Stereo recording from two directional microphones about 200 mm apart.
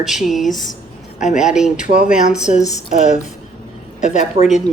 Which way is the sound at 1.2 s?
35° left (ahead or behind).